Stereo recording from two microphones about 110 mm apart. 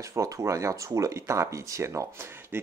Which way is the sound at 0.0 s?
30° right (ahead or behind).